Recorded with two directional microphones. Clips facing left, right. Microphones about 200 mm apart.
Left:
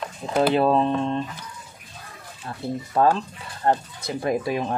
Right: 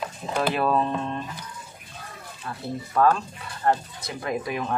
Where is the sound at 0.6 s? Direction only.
25° left (ahead or behind).